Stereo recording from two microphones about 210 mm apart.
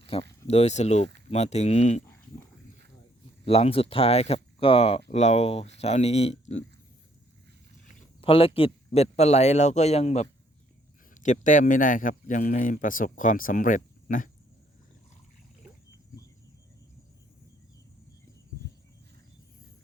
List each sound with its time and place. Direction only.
0.0 s a sound: 25° left (ahead or behind)
0.4 s a man's voice: 30° left (ahead or behind)
3.4 s a man's voice: 30° left (ahead or behind)
8.2 s a man's voice: 25° left (ahead or behind)